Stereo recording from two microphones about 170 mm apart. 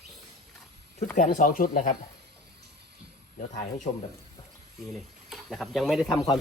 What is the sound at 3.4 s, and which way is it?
Speech, 45° left (ahead or behind).